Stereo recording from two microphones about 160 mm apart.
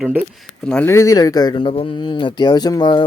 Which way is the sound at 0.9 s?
20° left (ahead or behind).